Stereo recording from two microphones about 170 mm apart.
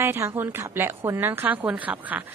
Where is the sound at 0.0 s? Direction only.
15° right (ahead or behind).